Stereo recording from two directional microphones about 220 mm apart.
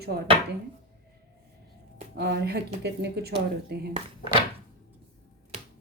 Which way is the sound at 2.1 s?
45° right (ahead or behind).